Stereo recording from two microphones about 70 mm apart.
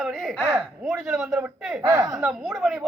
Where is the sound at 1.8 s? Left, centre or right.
Right.